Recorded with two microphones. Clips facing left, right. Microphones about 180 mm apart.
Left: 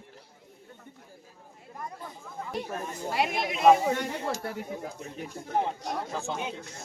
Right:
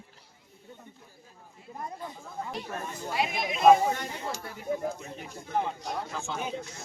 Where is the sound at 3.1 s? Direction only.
65° left (ahead or behind).